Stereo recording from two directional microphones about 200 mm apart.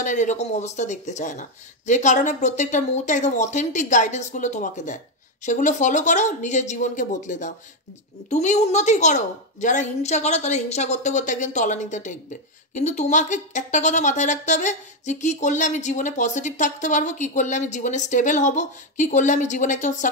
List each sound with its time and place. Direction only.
0.0 s a woman's voice: 40° left (ahead or behind)